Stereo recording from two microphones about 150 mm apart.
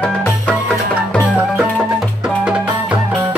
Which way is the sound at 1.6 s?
5° right (ahead or behind).